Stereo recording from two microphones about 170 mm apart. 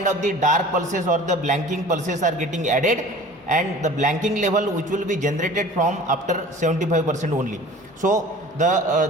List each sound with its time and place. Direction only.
0.0 s a man's voice: 45° right (ahead or behind)